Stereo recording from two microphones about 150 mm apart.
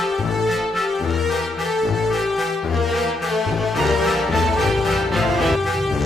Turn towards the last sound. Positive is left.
turn(degrees=0)  # may be behind; listen again after turning